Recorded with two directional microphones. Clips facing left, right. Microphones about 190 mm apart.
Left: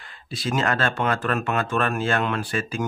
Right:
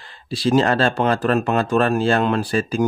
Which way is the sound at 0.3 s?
30° right (ahead or behind).